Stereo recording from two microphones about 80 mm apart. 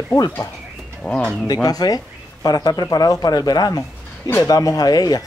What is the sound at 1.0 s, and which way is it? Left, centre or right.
Speech, centre.